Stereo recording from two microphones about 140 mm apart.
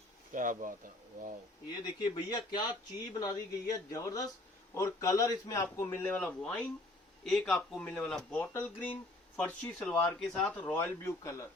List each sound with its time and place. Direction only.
0.3 s speech: 70° right (ahead or behind)
1.7 s speech: 30° left (ahead or behind)